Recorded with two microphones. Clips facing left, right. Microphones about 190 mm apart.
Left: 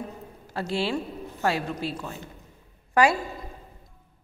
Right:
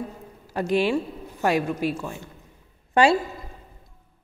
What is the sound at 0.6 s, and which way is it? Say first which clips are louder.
A woman's voice: right 5 dB; 15° right (ahead or behind).